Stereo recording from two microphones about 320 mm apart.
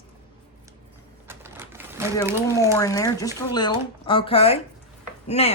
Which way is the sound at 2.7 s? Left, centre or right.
Centre.